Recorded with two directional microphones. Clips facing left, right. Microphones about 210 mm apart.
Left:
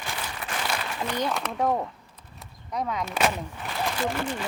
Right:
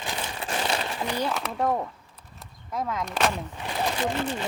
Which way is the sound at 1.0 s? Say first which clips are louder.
Left 2 dB; 10° right (ahead or behind).